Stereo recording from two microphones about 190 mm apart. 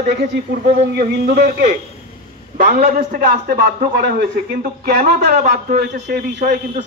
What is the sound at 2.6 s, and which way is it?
A man's voice, 50° right (ahead or behind).